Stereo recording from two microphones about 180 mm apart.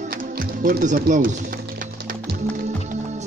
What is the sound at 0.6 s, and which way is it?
Speech, 50° right (ahead or behind).